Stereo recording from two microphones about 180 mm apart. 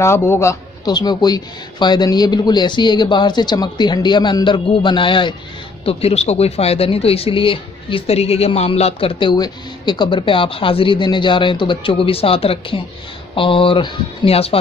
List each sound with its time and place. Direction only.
0.0 s speech: 15° left (ahead or behind); by 14.6 s 35° left (ahead or behind)